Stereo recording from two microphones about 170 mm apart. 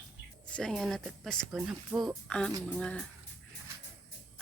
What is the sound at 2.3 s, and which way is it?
Speech, 5° left (ahead or behind).